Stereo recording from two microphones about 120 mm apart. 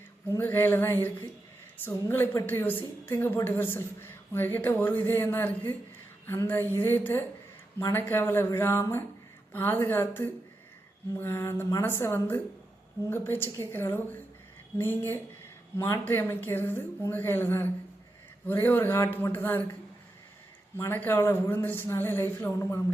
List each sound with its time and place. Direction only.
0.3 s a woman's voice: 20° left (ahead or behind)
20.7 s speech: 20° left (ahead or behind)